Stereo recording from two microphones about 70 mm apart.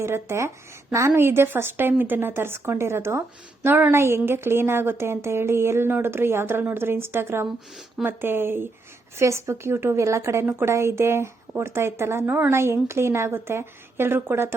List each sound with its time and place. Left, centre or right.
0.0 s a woman's voice: right
12.5 s speech: right